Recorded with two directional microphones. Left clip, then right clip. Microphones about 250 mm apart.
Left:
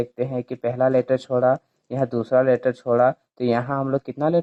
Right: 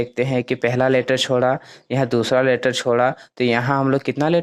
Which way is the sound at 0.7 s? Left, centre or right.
Right.